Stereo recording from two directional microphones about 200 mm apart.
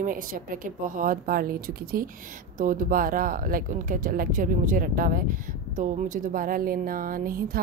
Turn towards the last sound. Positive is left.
turn(degrees=-45)  # may be behind; listen again after turning